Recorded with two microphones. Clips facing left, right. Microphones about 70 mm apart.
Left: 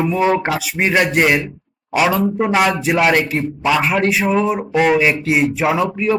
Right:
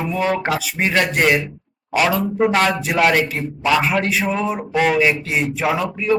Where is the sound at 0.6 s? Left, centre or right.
Centre.